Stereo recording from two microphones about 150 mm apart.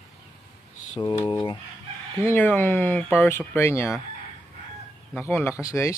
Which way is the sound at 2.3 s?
15° left (ahead or behind).